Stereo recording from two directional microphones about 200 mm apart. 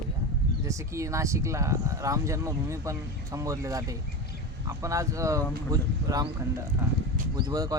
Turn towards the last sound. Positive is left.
turn(degrees=-20)  # may be behind; listen again after turning